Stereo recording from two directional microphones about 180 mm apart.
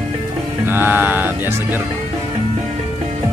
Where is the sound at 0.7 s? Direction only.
10° right (ahead or behind).